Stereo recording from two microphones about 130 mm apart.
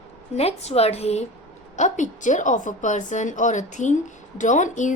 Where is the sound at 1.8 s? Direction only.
70° left (ahead or behind).